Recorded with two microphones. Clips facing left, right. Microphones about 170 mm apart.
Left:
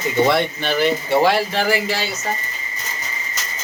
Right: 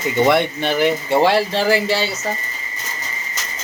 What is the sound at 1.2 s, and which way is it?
Speech, 30° right (ahead or behind).